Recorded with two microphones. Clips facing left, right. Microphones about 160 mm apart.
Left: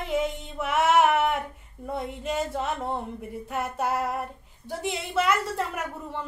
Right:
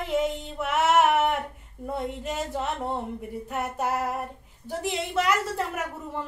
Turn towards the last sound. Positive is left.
turn(degrees=0)  # may be behind; listen again after turning